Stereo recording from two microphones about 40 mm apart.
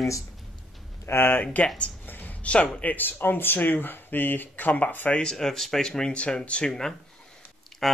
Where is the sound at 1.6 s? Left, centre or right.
Left.